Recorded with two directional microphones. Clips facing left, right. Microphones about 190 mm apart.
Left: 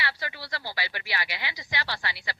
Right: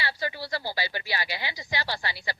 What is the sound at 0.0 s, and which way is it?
Speech, 30° right (ahead or behind).